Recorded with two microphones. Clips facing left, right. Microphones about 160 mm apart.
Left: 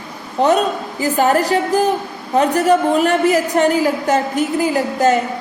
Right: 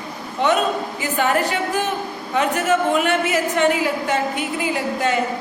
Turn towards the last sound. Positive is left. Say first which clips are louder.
# left 6 dB
turn(degrees=40)  # may be behind; listen again after turning